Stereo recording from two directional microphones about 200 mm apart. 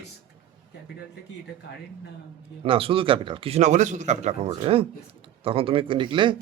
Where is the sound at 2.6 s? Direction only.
25° right (ahead or behind).